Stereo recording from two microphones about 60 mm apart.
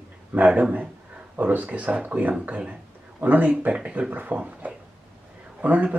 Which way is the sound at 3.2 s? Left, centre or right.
Right.